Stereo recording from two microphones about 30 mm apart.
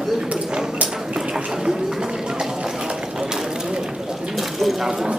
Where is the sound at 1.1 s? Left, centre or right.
Right.